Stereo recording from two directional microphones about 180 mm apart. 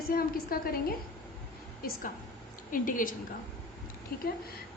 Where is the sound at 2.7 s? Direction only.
50° left (ahead or behind).